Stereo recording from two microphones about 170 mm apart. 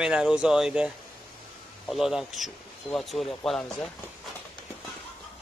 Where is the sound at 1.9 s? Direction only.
Centre (ahead or behind).